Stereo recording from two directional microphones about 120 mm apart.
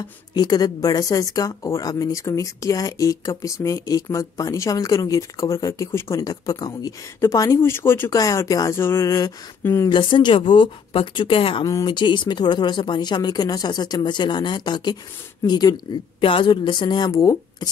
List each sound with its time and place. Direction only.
0.3 s speech: 35° left (ahead or behind)
9.8 s a woman's voice: 40° left (ahead or behind)